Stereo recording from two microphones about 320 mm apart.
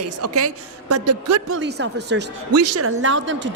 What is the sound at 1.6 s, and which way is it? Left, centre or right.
Speech, right.